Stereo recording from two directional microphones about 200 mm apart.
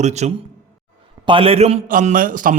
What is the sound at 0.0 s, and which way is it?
Speech, 35° right (ahead or behind).